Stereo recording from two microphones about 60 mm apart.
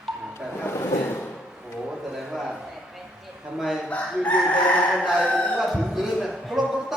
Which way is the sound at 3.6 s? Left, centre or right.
Centre.